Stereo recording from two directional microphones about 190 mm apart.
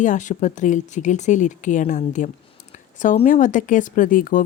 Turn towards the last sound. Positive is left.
turn(degrees=45)  # may be behind; listen again after turning